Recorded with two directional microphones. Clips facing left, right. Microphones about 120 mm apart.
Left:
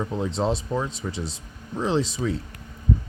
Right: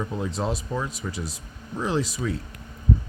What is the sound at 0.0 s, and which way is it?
Speech, 25° left (ahead or behind).